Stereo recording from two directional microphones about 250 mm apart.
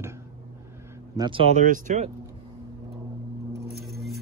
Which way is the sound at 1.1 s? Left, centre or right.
Centre.